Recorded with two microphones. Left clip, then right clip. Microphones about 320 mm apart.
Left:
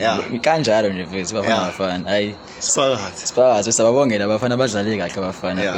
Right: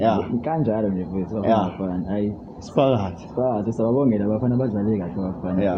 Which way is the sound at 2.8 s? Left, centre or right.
Centre.